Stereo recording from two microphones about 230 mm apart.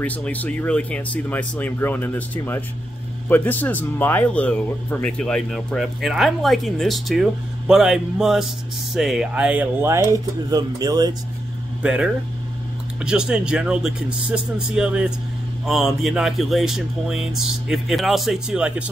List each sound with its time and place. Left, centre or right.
0.0 s speech: centre
11.8 s speech: centre